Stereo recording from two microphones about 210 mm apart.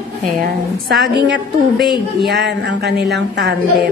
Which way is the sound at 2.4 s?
55° right (ahead or behind).